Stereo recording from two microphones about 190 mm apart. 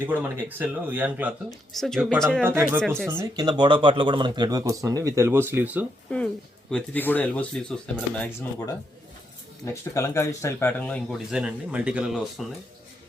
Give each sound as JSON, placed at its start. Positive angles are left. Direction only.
{"t": 0.0, "sound": "speech", "side_deg": -10}
{"t": 2.4, "sound": "speech", "side_deg": -10}
{"t": 3.4, "sound": "speech", "side_deg": -25}
{"t": 6.1, "sound": "speech", "side_deg": 5}